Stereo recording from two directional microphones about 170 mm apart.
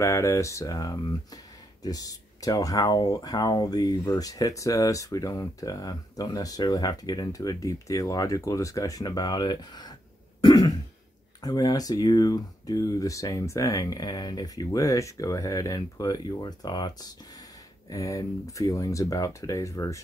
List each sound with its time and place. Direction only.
0.0 s speech: 15° left (ahead or behind)